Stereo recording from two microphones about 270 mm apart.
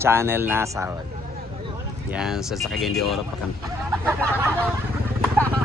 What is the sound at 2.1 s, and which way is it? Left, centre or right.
Speech, centre.